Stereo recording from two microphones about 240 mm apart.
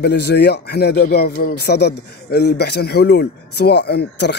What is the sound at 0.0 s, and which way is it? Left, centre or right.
Speech, left.